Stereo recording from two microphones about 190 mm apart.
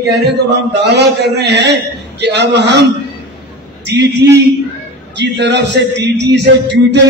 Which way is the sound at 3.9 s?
65° right (ahead or behind).